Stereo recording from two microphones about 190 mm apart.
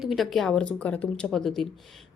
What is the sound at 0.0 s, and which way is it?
A woman's voice, centre (ahead or behind).